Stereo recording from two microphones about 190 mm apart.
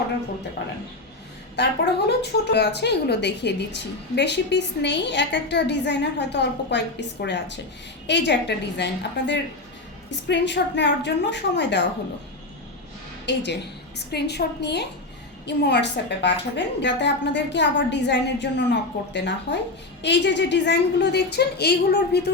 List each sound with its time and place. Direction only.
1.5 s a woman's voice: 60° left (ahead or behind)
13.2 s a woman's voice: 65° left (ahead or behind)